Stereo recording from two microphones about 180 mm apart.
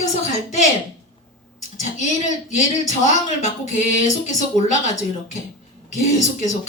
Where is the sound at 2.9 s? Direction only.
40° left (ahead or behind).